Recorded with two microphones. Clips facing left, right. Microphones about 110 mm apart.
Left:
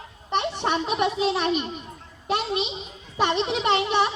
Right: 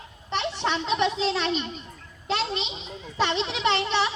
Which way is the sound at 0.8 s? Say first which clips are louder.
Right 1 dB; 15° left (ahead or behind).